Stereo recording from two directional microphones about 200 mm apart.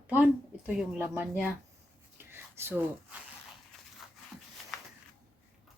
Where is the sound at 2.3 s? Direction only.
10° right (ahead or behind).